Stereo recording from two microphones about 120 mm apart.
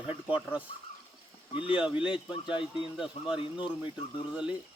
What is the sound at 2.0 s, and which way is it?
Speech, 10° right (ahead or behind).